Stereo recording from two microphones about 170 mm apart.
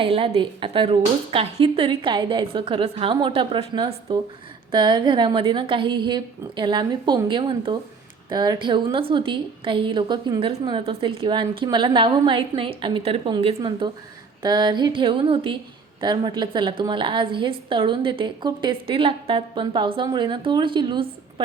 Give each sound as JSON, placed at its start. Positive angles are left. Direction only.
{"t": 0.0, "sound": "a woman's voice", "side_deg": -30}